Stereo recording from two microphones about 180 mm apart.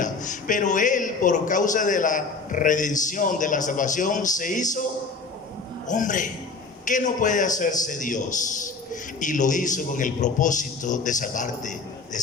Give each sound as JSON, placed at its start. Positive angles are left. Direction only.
{"t": 0.0, "sound": "a man's voice", "side_deg": 45}
{"t": 5.9, "sound": "a man's voice", "side_deg": 45}